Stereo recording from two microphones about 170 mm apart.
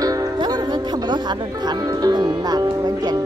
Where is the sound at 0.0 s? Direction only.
20° right (ahead or behind).